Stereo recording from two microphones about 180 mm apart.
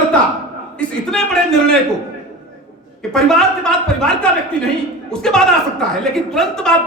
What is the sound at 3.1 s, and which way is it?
Speech, centre (ahead or behind).